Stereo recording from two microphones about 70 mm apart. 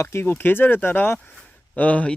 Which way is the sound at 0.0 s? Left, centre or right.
Left.